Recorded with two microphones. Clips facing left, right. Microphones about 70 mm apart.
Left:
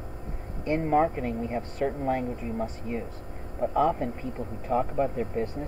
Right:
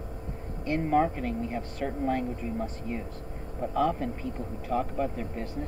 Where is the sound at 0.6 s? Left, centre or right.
Centre.